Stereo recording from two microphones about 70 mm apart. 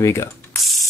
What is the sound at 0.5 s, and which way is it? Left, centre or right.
Mechanisms, centre.